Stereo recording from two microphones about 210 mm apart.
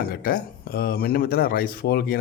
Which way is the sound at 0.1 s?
45° left (ahead or behind).